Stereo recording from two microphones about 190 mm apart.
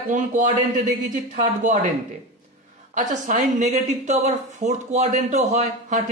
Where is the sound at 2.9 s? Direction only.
40° right (ahead or behind).